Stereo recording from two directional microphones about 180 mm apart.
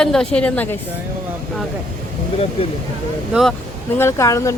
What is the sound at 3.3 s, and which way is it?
Speech, centre (ahead or behind).